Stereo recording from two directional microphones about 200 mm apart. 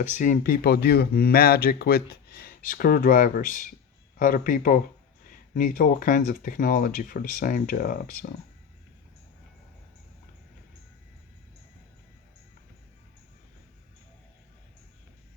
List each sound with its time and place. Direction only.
0.2 s speech: 45° left (ahead or behind)